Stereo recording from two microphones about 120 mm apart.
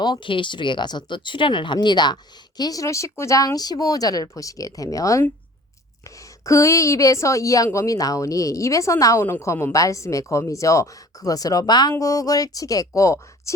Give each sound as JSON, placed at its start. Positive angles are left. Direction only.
{"t": 0.0, "sound": "speech", "side_deg": 40}